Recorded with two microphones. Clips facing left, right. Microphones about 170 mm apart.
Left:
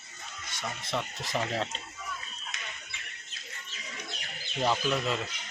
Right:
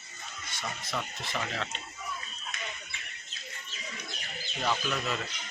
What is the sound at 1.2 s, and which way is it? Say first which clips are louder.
Speech: left 4 dB; 35° left (ahead or behind).